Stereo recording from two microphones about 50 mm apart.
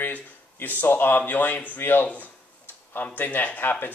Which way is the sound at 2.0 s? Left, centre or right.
Left.